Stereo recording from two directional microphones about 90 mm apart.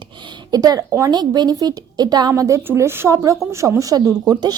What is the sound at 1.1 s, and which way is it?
A woman's voice, 50° right (ahead or behind).